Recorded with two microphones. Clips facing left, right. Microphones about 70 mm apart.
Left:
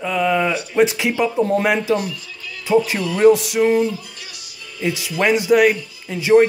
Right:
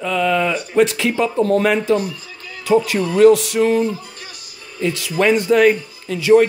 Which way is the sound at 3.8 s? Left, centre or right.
Right.